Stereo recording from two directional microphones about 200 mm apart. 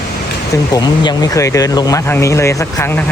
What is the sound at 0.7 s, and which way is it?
Speech, 20° left (ahead or behind).